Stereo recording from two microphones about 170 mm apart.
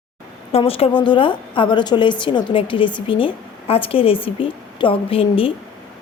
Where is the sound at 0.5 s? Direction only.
35° left (ahead or behind).